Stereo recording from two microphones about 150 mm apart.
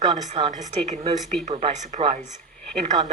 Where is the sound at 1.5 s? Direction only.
35° right (ahead or behind).